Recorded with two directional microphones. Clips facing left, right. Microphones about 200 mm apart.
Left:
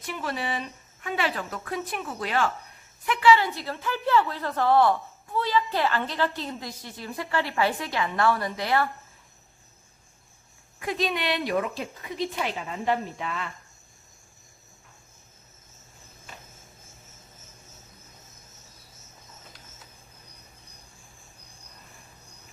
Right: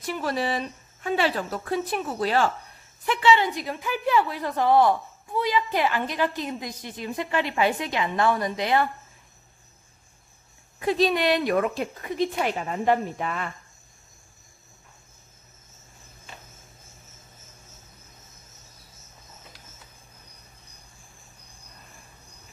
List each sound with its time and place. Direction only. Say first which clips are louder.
0.0 s speech: right 5 dB; 40° right (ahead or behind)
3.1 s a woman's voice: even; 25° right (ahead or behind)
10.8 s a woman's voice: right 6 dB; 30° right (ahead or behind); by 13.5 s 50° right (ahead or behind)